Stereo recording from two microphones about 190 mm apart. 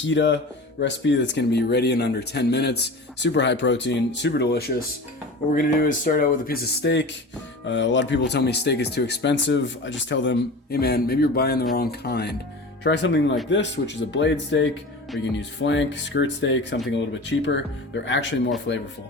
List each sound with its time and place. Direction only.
0.0 s speech: 70° left (ahead or behind)
5.5 s speech: 45° left (ahead or behind); by 18.5 s 75° left (ahead or behind)